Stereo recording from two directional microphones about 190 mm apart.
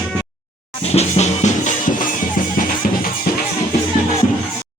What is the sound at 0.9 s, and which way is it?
Music, 40° left (ahead or behind).